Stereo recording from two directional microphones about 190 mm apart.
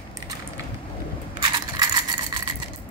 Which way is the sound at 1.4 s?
20° right (ahead or behind).